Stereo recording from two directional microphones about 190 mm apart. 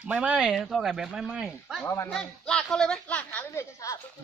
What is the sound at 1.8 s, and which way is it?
Speech, 15° left (ahead or behind).